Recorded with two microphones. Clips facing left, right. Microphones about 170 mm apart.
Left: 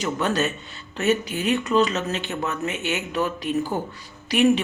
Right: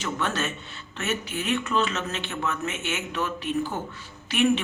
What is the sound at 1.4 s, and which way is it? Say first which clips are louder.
Speech: left 5 dB; 35° left (ahead or behind).